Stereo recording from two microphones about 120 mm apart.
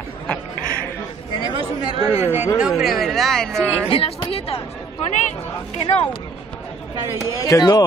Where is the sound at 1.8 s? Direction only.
45° right (ahead or behind).